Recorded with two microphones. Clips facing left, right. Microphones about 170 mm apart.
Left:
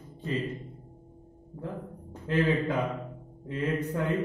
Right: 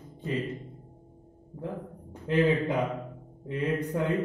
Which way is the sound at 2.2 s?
20° right (ahead or behind).